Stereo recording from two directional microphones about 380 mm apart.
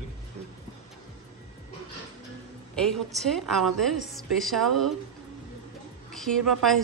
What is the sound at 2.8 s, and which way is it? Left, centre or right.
A woman's voice, centre.